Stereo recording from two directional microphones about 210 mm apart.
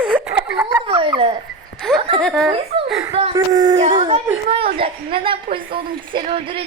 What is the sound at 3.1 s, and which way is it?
Speech, 25° right (ahead or behind).